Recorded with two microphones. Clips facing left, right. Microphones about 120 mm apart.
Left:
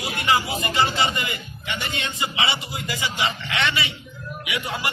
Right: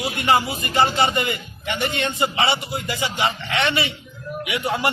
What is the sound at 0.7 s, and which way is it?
A man's voice, 55° right (ahead or behind).